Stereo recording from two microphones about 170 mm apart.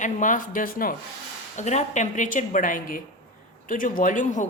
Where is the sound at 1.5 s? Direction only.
45° left (ahead or behind).